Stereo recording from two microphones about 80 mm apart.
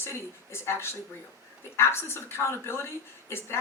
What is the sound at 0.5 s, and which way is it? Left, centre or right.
Speech, left.